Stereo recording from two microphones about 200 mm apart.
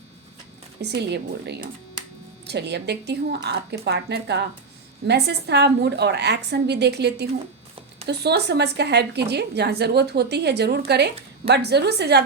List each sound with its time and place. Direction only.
0.8 s a woman's voice: 55° right (ahead or behind)